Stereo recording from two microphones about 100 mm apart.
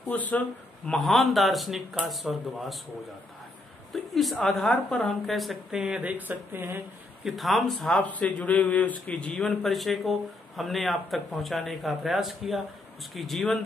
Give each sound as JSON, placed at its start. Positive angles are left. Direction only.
{"t": 0.1, "sound": "a man's voice", "side_deg": 15}
{"t": 0.9, "sound": "speech", "side_deg": 0}
{"t": 3.9, "sound": "a woman's voice", "side_deg": 0}
{"t": 5.3, "sound": "speech", "side_deg": 0}
{"t": 7.2, "sound": "speech", "side_deg": 0}
{"t": 8.0, "sound": "a man's voice", "side_deg": 15}